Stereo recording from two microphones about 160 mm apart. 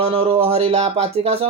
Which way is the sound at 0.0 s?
40° right (ahead or behind).